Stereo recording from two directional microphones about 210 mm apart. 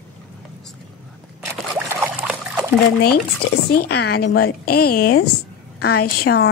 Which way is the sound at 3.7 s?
50° left (ahead or behind).